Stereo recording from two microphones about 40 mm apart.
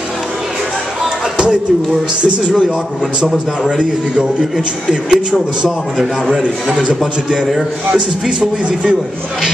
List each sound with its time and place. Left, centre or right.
2.4 s a man's voice: centre
6.4 s speech: right